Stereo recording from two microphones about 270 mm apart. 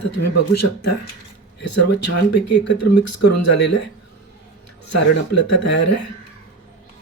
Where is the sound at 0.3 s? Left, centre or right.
Left.